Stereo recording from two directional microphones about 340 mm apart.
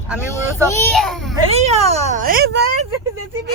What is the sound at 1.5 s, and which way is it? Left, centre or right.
Speech, centre.